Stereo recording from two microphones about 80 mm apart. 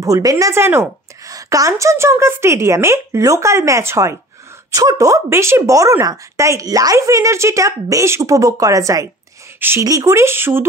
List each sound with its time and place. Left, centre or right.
0.0 s a woman's voice: right
0.6 s a woman's voice: right
1.3 s a woman's voice: right